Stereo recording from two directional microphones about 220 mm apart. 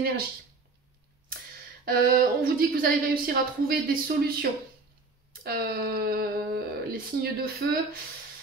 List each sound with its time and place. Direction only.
1.9 s speech: 40° right (ahead or behind)